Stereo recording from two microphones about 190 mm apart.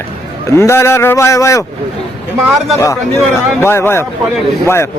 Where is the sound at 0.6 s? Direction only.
15° left (ahead or behind).